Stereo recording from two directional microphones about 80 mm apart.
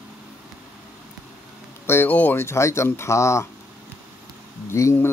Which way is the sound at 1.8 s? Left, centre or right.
Left.